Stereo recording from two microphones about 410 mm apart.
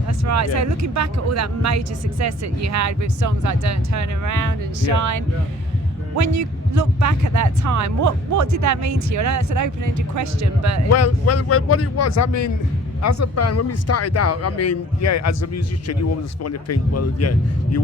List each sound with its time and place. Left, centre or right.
0.3 s speech: right
10.9 s speech: left